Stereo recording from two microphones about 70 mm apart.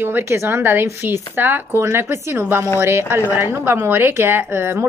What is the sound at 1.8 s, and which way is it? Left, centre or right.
A woman's voice, right.